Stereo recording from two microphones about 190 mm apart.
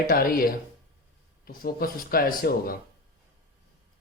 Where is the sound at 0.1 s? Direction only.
50° left (ahead or behind).